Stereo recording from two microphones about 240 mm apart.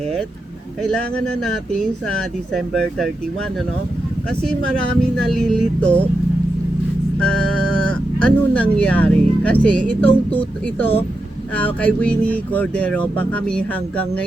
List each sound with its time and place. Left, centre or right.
0.8 s speech: centre
2.5 s speech: centre
5.3 s speech: centre
7.8 s speech: centre